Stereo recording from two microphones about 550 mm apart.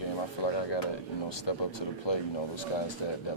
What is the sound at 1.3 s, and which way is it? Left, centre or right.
A man's voice, left.